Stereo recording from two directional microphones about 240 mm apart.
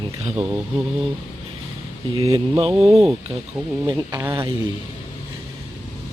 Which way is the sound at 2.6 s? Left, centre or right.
Centre.